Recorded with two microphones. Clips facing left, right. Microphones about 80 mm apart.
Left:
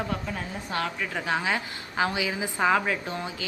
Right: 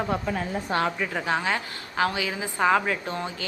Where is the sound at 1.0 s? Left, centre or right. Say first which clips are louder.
Right 2 dB; centre.